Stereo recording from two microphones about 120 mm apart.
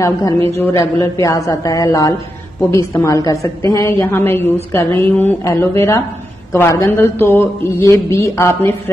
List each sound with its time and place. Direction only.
0.0 s a woman's voice: 30° left (ahead or behind)
0.5 s speech: 20° left (ahead or behind)
0.7 s speech: 30° left (ahead or behind)